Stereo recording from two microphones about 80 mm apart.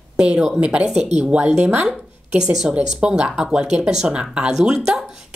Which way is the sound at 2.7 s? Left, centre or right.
Centre.